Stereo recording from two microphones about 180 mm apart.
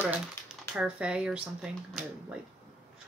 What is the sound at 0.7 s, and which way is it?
Speech, 5° right (ahead or behind).